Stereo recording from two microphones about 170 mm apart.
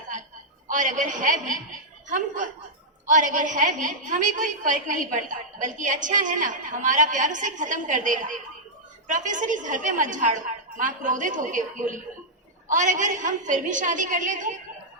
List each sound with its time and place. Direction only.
0.7 s a woman's voice: 45° right (ahead or behind)